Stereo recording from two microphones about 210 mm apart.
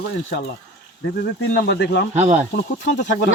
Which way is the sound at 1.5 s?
55° left (ahead or behind).